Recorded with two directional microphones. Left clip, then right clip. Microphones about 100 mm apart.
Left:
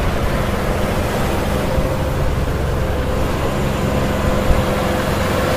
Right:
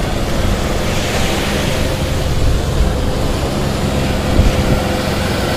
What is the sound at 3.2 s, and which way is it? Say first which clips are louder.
Vehicle: right 1 dB; 20° left (ahead or behind).